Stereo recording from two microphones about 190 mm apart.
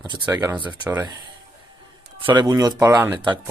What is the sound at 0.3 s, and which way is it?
Speech, 10° right (ahead or behind).